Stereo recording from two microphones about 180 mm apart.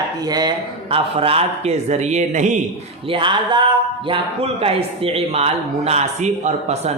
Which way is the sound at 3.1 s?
25° right (ahead or behind).